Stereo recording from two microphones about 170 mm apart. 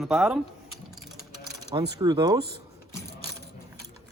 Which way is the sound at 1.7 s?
20° right (ahead or behind).